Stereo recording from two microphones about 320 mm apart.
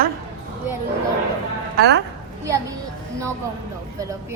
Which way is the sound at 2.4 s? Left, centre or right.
Centre.